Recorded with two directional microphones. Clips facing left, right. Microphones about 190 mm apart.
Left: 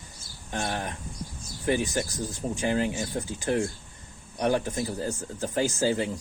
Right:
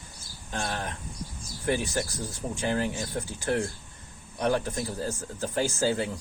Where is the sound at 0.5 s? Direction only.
20° left (ahead or behind).